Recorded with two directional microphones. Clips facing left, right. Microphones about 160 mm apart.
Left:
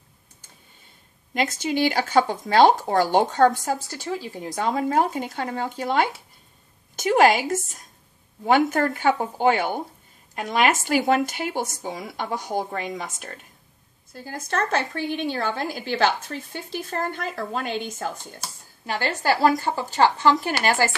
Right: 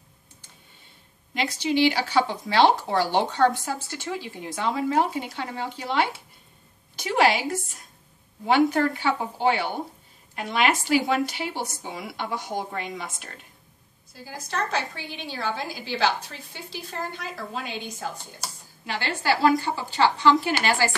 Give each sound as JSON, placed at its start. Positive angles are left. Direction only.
{"t": 1.3, "sound": "speech", "side_deg": 45}